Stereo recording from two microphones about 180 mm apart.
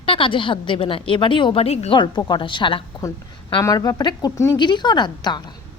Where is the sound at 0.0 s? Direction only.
30° left (ahead or behind).